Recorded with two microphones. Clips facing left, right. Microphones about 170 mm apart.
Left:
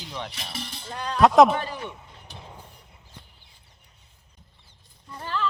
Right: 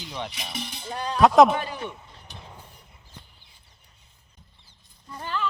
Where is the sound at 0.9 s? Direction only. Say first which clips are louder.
Right 1 dB; 10° right (ahead or behind).